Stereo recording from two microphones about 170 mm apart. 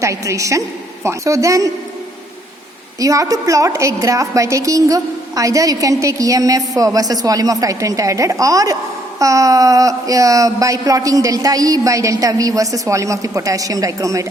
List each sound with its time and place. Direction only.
0.0 s a woman's voice: 20° right (ahead or behind)
3.0 s a woman's voice: 20° right (ahead or behind)